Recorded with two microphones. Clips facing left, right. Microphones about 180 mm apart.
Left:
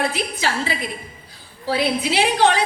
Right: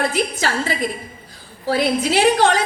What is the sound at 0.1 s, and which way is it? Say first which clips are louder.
A woman's voice: right 3 dB; 45° right (ahead or behind).